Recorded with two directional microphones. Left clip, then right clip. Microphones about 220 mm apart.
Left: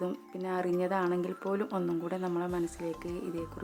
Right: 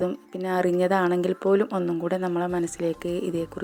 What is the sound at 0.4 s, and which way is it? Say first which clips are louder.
Speech: right 9 dB; 25° right (ahead or behind).